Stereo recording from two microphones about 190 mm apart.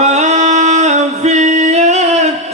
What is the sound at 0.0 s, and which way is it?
Singing, 35° right (ahead or behind).